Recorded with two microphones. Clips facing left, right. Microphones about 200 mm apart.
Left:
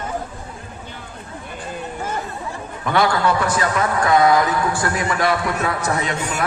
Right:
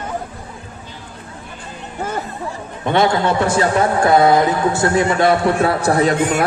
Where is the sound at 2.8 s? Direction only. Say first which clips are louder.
Right 3 dB; 25° right (ahead or behind).